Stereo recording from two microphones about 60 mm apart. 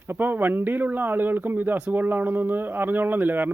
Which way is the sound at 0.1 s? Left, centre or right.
Right.